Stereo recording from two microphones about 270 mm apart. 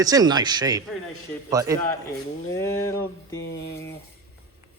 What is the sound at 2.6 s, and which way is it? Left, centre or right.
Speech, centre.